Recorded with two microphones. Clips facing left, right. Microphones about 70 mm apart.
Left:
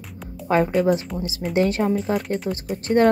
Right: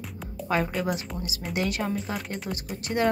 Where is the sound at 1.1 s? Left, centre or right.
Left.